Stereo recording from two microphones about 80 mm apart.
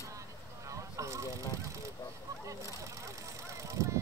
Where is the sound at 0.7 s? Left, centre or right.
Right.